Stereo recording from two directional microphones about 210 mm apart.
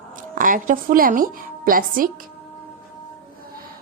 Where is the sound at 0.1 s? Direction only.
40° right (ahead or behind).